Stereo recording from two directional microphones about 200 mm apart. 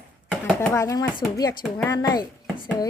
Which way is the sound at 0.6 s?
15° left (ahead or behind).